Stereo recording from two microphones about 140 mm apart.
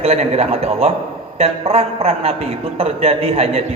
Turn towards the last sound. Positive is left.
turn(degrees=-45)  # may be behind; listen again after turning